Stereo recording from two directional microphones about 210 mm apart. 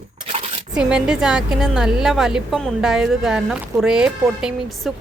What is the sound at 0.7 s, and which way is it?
A woman's voice, 5° right (ahead or behind).